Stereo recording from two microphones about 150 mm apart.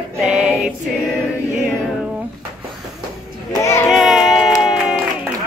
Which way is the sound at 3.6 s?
20° left (ahead or behind).